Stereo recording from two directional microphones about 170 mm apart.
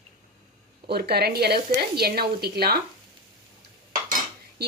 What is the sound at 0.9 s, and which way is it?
A woman's voice, 70° right (ahead or behind).